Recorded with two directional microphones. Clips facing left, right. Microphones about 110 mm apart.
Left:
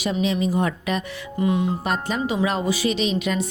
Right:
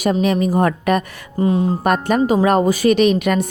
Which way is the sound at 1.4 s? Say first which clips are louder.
Right 5 dB; 35° right (ahead or behind).